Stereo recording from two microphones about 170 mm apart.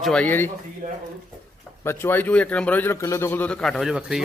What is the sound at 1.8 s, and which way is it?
A man's voice, 15° left (ahead or behind).